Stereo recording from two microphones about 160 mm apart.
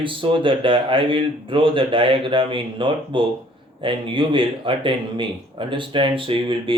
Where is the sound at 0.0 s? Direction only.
30° right (ahead or behind).